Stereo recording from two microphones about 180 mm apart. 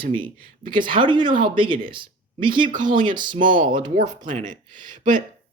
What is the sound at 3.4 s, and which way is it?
Speech, 50° right (ahead or behind).